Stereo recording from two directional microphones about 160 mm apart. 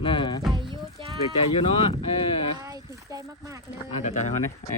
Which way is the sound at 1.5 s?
40° left (ahead or behind).